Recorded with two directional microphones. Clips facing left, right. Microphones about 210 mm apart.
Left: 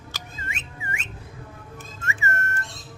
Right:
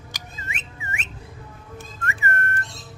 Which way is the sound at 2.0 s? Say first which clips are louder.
Right 2 dB; 55° right (ahead or behind).